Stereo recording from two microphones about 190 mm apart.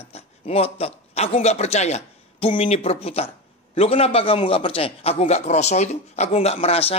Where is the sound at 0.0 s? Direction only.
30° left (ahead or behind).